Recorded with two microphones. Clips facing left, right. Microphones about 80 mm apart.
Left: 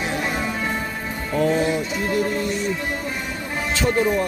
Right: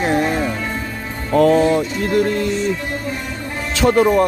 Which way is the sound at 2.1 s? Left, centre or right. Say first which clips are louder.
Right 6 dB; right.